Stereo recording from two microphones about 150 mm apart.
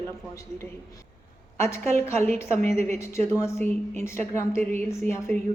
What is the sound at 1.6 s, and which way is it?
A woman's voice, 20° left (ahead or behind).